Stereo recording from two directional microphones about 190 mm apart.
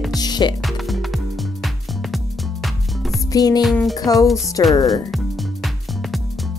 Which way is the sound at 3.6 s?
Centre (ahead or behind).